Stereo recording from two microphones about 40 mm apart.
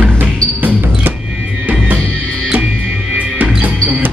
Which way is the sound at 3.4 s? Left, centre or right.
Right.